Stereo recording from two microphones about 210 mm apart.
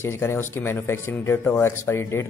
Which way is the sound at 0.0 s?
10° left (ahead or behind).